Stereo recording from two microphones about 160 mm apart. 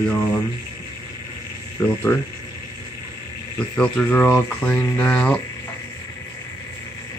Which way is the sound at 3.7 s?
10° left (ahead or behind).